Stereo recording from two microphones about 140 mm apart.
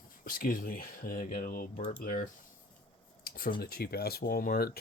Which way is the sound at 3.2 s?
90° left.